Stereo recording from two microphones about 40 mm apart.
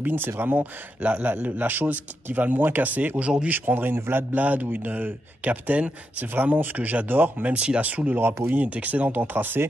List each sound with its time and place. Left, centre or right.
0.0 s a man's voice: right
1.0 s a man's voice: right
1.3 s speech: right
3.2 s speech: right
3.4 s a man's voice: right
4.4 s speech: right
7.4 s speech: right
8.2 s a man's voice: right
8.5 s speech: right